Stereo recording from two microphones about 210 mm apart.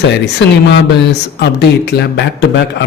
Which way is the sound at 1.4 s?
50° left (ahead or behind).